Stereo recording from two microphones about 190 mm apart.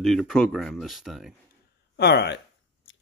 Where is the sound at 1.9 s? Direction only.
60° left (ahead or behind).